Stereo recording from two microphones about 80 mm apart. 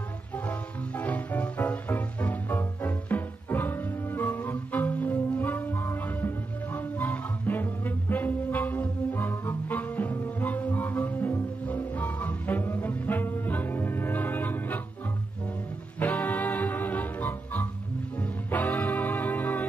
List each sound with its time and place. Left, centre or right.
0.5 s music: centre
16.0 s music: left